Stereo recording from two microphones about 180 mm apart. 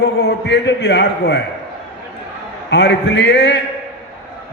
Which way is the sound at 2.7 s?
80° left.